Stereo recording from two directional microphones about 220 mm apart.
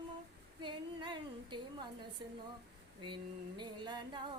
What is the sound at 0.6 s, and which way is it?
Female singing, 20° right (ahead or behind).